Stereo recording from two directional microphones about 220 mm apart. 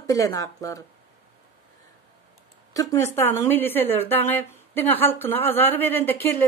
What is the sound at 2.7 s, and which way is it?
Speech, 15° left (ahead or behind).